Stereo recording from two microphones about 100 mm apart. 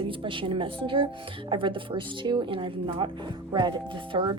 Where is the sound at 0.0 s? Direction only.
60° right (ahead or behind).